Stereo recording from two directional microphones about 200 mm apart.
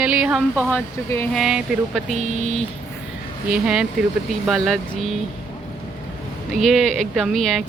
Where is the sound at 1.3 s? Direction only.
Centre (ahead or behind).